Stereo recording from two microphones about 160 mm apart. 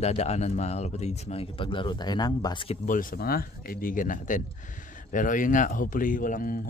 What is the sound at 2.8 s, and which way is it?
Speech, 60° left (ahead or behind).